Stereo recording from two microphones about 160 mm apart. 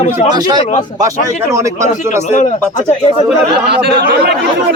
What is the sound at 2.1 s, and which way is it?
Speech, 50° left (ahead or behind).